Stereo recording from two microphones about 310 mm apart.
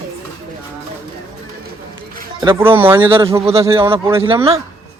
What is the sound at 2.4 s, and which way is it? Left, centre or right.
A man's voice, centre.